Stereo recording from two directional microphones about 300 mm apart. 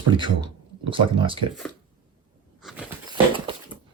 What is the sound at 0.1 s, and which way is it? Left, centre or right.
Speech, centre.